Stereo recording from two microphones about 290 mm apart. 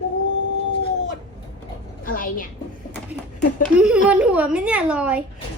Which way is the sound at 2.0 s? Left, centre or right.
Left.